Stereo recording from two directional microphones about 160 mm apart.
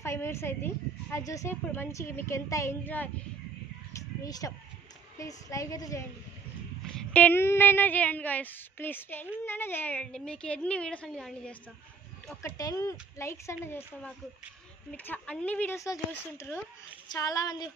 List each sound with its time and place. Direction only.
0.0 s a woman's voice: 15° left (ahead or behind)
3.9 s a sound: 20° left (ahead or behind)
5.2 s a woman's voice: 20° left (ahead or behind)
6.9 s speech: 5° left (ahead or behind)
12.4 s a woman's voice: 20° left (ahead or behind)